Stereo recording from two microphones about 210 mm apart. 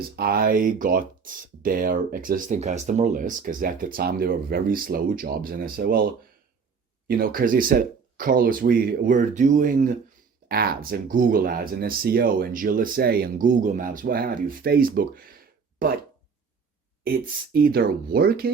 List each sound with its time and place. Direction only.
0.2 s speech: 45° right (ahead or behind)
17.0 s speech: 45° right (ahead or behind)